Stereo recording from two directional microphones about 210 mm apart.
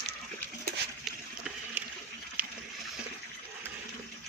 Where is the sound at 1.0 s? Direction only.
5° right (ahead or behind).